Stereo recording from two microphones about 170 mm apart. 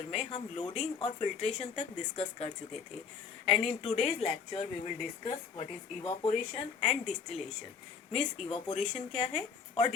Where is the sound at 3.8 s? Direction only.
40° left (ahead or behind).